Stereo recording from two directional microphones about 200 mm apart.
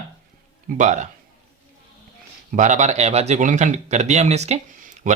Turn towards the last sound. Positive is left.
turn(degrees=-40)  # may be behind; listen again after turning